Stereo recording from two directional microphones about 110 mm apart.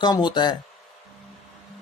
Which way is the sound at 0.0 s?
40° left (ahead or behind).